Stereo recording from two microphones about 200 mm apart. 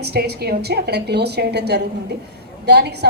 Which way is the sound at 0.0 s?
55° right (ahead or behind).